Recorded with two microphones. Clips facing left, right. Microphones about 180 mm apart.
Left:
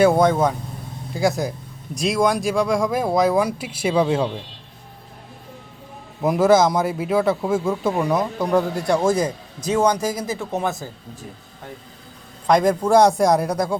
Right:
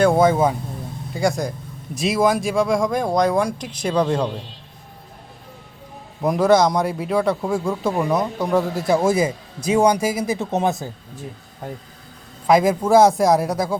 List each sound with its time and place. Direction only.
0.0 s a man's voice: centre (ahead or behind)
6.2 s a man's voice: centre (ahead or behind)
10.3 s speech: 20° right (ahead or behind)
12.5 s a man's voice: 5° right (ahead or behind)